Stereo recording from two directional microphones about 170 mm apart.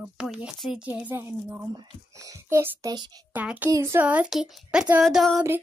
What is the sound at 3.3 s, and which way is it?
A child's voice, 10° right (ahead or behind).